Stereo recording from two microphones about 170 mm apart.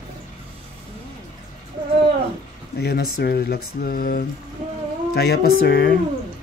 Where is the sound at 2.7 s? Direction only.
65° left (ahead or behind).